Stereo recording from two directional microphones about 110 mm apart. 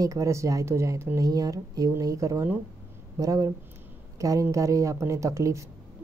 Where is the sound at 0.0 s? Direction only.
30° right (ahead or behind).